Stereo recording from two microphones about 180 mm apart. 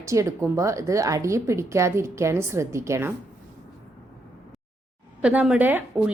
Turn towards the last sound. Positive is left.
turn(degrees=-10)  # may be behind; listen again after turning